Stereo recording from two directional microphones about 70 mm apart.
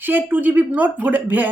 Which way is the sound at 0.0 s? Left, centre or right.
Right.